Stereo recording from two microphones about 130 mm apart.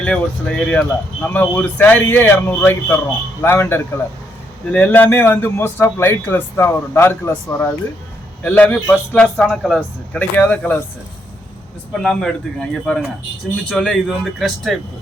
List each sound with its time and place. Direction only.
0.0 s a man's voice: 10° left (ahead or behind)
10.2 s a man's voice: 10° left (ahead or behind)
12.0 s a man's voice: 5° left (ahead or behind)